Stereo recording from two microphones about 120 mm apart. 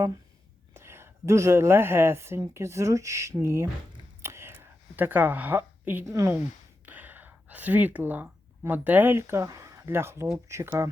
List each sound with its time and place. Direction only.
0.7 s a woman's voice: 20° right (ahead or behind)
4.2 s whispering: 20° right (ahead or behind)
6.1 s speech: 25° right (ahead or behind)
6.8 s speech: 15° right (ahead or behind)